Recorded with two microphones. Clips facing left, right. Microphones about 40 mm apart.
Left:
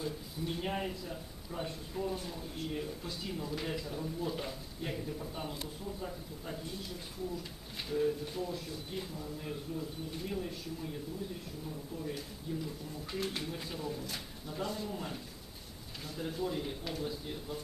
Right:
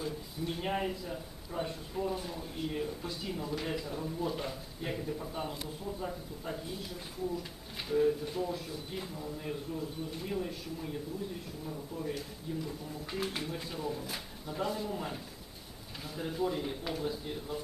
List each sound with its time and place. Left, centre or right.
0.0 s a man's voice: centre